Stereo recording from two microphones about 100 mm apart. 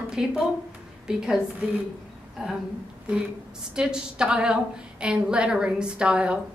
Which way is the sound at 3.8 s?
10° right (ahead or behind).